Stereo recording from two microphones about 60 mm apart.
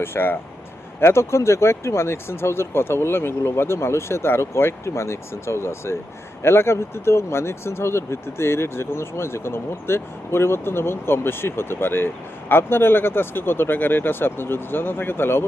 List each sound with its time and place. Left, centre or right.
0.0 s speech: left